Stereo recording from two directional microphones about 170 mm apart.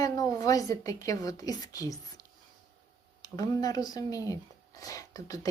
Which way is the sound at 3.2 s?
20° left (ahead or behind).